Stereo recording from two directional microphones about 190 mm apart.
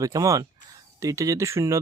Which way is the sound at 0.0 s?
15° right (ahead or behind).